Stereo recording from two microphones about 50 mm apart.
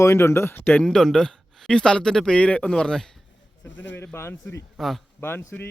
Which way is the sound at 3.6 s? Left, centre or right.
Left.